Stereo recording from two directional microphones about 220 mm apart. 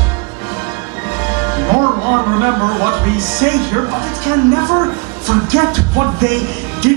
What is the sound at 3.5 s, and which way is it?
Speech, 25° right (ahead or behind).